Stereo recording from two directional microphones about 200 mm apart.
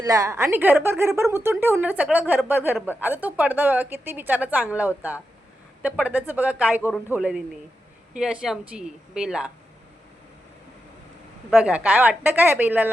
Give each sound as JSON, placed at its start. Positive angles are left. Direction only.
{"t": 0.0, "sound": "a woman's voice", "side_deg": -15}
{"t": 11.5, "sound": "a woman's voice", "side_deg": -5}